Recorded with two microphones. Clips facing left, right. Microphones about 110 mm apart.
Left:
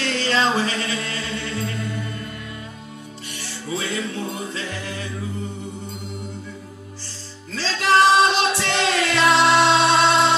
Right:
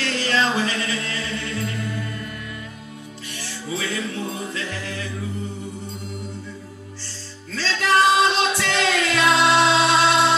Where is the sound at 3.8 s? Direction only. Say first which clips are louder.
Left 1 dB; 25° left (ahead or behind).